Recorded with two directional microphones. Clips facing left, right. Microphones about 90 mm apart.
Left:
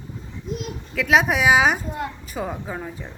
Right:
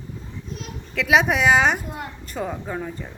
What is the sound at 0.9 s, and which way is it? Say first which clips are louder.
A woman's voice: even; centre (ahead or behind).